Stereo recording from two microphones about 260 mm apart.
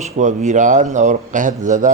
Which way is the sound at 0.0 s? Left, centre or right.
Right.